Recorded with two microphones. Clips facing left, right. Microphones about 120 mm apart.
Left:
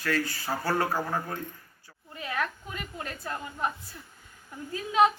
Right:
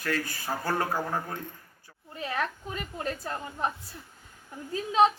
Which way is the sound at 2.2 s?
30° right (ahead or behind).